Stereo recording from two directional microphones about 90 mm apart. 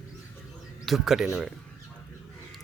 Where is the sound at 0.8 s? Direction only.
5° right (ahead or behind).